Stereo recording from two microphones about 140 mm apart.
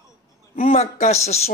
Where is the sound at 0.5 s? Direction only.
45° left (ahead or behind).